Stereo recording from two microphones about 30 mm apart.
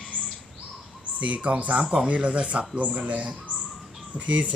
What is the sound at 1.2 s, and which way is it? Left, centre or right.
Speech, right.